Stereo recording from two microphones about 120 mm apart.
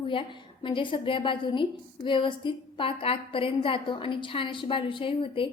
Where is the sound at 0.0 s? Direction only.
45° left (ahead or behind).